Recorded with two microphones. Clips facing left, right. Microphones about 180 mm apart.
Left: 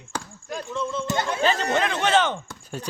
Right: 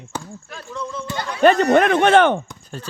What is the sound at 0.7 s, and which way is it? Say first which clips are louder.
Speech: left 1 dB; 25° left (ahead or behind).